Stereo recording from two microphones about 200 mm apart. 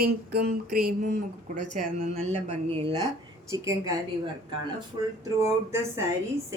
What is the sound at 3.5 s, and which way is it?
Speech, 15° right (ahead or behind).